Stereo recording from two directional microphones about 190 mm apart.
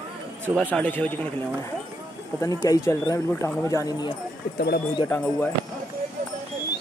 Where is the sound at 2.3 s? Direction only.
15° left (ahead or behind).